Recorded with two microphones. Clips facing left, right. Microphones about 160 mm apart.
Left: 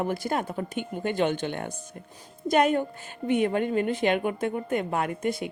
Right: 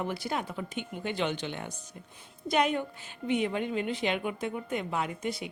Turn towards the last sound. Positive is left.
turn(degrees=50)  # may be behind; listen again after turning